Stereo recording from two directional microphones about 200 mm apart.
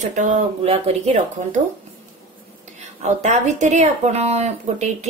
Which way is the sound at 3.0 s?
35° right (ahead or behind).